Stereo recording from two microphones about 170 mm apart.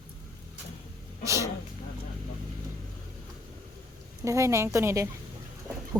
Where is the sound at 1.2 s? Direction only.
20° right (ahead or behind).